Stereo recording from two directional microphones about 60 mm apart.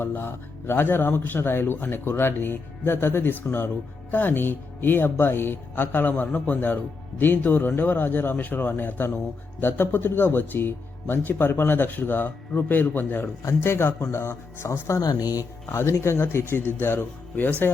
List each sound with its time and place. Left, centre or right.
0.0 s speech: left
13.6 s speech: left
15.7 s speech: left